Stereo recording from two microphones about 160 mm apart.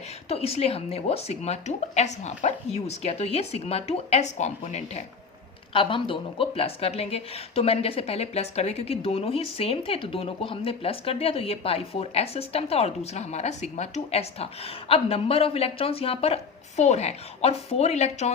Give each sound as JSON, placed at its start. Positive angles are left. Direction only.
{"t": 0.3, "sound": "a woman's voice", "side_deg": 40}
{"t": 5.7, "sound": "a woman's voice", "side_deg": 30}